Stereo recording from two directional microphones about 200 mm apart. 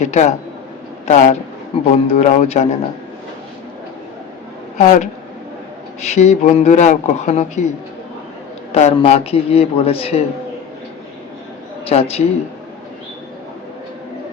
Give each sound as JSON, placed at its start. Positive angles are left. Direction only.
{"t": 0.0, "sound": "a man's voice", "side_deg": 35}
{"t": 4.8, "sound": "speech", "side_deg": 35}
{"t": 8.7, "sound": "a man's voice", "side_deg": 30}
{"t": 11.9, "sound": "speech", "side_deg": 30}